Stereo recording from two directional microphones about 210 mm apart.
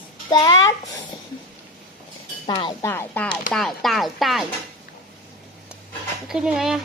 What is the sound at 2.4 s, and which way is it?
A woman's voice, 20° left (ahead or behind).